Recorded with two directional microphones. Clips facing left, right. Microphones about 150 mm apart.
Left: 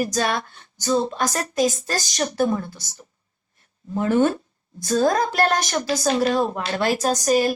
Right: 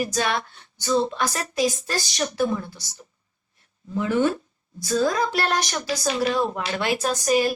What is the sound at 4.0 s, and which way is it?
A woman's voice, 50° left (ahead or behind).